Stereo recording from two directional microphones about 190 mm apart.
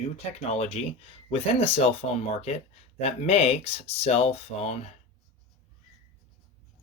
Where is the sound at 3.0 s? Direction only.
30° left (ahead or behind).